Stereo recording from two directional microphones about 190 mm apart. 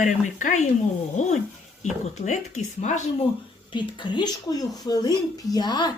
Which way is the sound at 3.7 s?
25° left (ahead or behind).